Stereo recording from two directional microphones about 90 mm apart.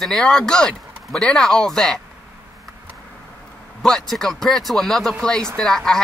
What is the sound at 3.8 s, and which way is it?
Speech, 5° left (ahead or behind).